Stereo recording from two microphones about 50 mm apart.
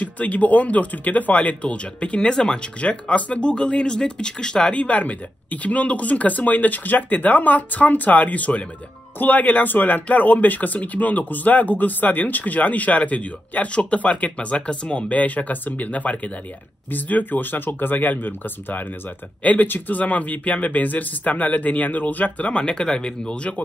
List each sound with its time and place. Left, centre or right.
0.0 s speech: left